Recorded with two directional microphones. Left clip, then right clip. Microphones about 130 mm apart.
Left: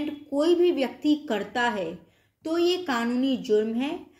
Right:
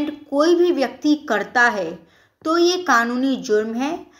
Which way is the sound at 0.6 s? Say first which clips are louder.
Right 5 dB; 20° left (ahead or behind).